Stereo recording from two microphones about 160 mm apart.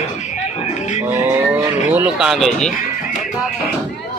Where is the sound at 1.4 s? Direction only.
10° right (ahead or behind).